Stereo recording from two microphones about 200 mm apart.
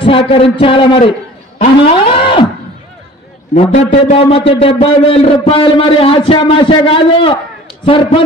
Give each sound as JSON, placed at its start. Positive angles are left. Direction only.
{"t": 0.3, "sound": "a man's voice", "side_deg": 30}
{"t": 1.8, "sound": "a sound", "side_deg": 25}
{"t": 3.5, "sound": "a man's voice", "side_deg": 35}